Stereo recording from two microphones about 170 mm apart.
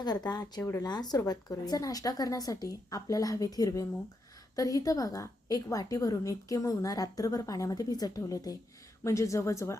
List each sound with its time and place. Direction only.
0.0 s a woman's voice: 25° left (ahead or behind)